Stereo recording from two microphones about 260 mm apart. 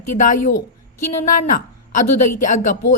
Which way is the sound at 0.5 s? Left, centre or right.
Left.